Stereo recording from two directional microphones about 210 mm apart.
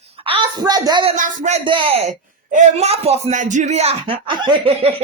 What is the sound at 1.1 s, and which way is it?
A woman's voice, 35° right (ahead or behind).